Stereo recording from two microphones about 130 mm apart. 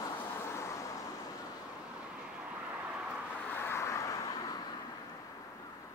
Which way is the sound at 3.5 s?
15° left (ahead or behind).